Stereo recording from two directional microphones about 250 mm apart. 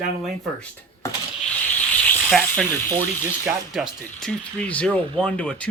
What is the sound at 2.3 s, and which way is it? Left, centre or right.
Speech, centre.